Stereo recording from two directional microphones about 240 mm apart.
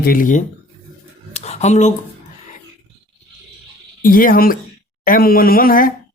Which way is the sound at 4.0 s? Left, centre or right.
Left.